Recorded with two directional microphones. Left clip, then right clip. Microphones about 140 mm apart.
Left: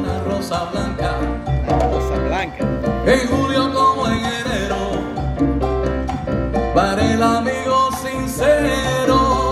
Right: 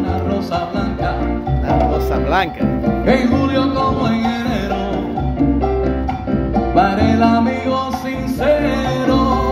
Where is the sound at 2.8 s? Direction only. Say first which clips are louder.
Even; 35° left (ahead or behind).